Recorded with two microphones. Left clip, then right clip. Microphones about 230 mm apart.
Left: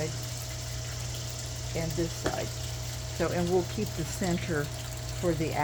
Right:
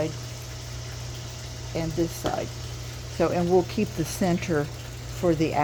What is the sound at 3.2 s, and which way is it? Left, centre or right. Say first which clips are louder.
Speech: right 6 dB; right.